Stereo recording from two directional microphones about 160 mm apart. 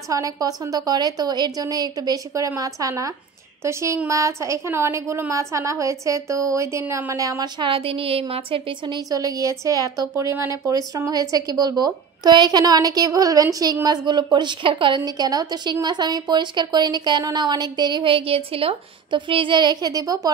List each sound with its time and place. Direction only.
0.1 s a woman's voice: 20° right (ahead or behind)